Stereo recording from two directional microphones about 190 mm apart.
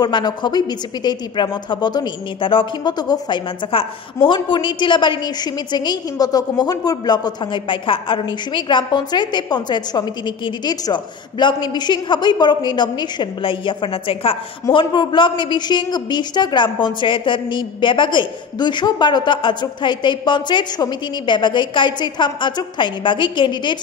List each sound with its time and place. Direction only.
0.0 s a woman's voice: 25° left (ahead or behind)